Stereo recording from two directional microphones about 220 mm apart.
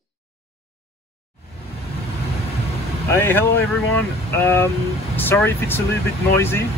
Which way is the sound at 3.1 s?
10° left (ahead or behind).